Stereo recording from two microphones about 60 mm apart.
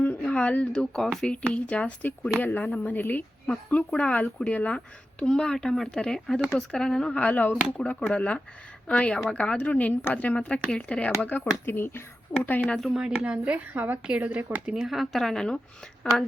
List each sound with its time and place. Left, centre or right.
0.0 s a sound: left
0.7 s speech: centre
1.3 s speech: centre
5.2 s speech: centre
7.2 s speech: left
7.5 s speech: centre
11.3 s speech: left
12.9 s a woman's voice: centre
14.8 s speech: centre